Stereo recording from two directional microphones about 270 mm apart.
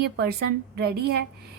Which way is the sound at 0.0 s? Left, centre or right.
Right.